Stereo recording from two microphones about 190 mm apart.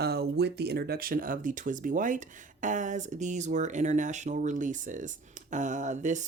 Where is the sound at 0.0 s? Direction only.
55° right (ahead or behind).